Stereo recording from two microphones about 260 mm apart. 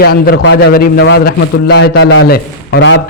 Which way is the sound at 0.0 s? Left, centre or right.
Left.